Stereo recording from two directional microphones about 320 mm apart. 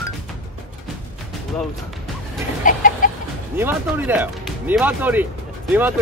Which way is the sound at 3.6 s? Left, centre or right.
Centre.